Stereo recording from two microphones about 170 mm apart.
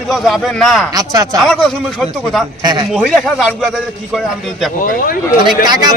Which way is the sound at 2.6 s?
25° right (ahead or behind).